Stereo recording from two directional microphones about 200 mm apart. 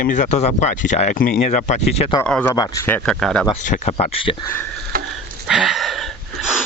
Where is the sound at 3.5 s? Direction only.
30° left (ahead or behind).